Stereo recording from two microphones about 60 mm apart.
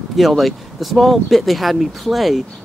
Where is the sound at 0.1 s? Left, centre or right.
Centre.